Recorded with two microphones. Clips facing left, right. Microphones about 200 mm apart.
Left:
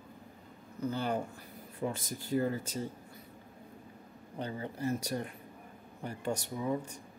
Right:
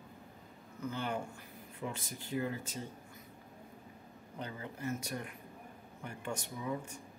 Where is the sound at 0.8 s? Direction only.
35° left (ahead or behind).